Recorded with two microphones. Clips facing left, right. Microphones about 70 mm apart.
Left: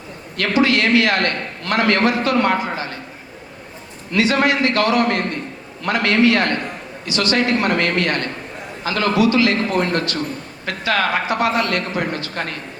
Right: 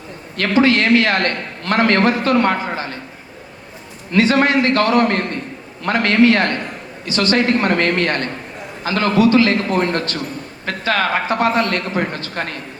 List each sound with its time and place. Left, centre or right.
0.3 s a man's voice: right
4.1 s a man's voice: right